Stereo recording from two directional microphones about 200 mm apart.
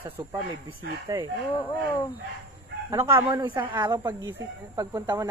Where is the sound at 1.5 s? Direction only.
25° left (ahead or behind).